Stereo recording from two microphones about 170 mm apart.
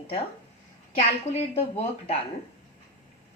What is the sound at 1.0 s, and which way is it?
Speech, 40° left (ahead or behind).